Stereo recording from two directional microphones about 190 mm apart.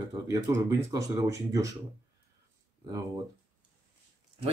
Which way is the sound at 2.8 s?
20° right (ahead or behind).